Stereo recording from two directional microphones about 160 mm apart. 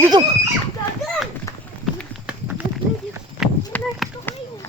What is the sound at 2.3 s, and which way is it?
Horse, 10° right (ahead or behind).